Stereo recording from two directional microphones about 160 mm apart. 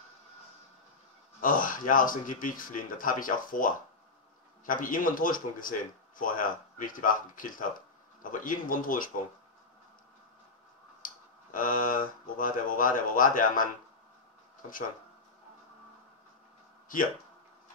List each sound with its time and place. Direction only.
1.4 s speech: 55° left (ahead or behind)
11.5 s speech: 55° left (ahead or behind)